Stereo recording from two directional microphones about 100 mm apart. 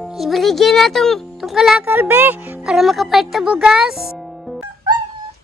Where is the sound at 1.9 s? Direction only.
20° right (ahead or behind); by 4.6 s centre (ahead or behind).